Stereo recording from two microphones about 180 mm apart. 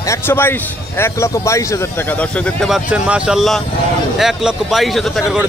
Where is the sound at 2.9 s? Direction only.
5° right (ahead or behind).